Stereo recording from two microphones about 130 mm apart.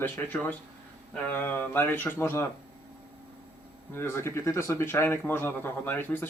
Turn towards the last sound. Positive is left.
turn(degrees=15)  # may be behind; listen again after turning